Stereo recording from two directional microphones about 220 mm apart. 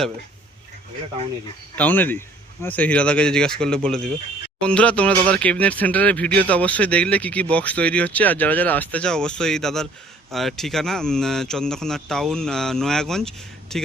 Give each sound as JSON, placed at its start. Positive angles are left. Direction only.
{"t": 1.7, "sound": "speech", "side_deg": 5}